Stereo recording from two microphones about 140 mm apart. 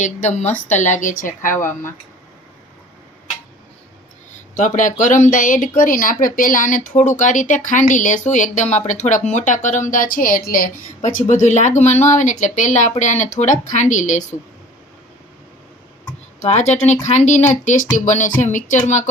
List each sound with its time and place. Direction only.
0.0 s speech: 60° left (ahead or behind)
4.5 s speech: 65° left (ahead or behind)
16.4 s speech: 55° left (ahead or behind)